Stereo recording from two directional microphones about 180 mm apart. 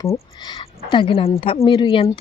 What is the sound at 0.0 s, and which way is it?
Speech, 20° left (ahead or behind).